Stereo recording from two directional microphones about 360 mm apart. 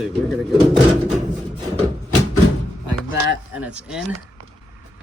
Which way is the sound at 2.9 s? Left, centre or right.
Left.